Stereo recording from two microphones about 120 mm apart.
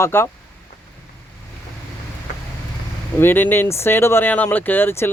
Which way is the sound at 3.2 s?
15° left (ahead or behind).